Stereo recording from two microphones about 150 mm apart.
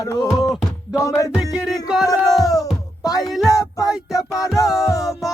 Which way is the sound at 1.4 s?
5° right (ahead or behind).